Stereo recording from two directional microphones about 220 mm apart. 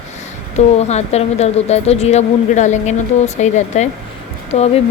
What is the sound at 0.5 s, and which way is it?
Speech, 30° left (ahead or behind).